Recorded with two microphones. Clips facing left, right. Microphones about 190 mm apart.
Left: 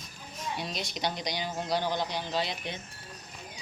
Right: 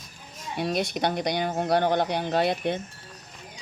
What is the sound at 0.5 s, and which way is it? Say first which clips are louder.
Speech: right 13 dB; 55° right (ahead or behind).